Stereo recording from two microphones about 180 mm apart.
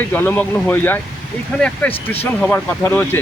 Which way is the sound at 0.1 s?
10° left (ahead or behind).